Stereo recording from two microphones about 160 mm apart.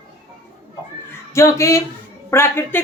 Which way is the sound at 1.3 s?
20° left (ahead or behind).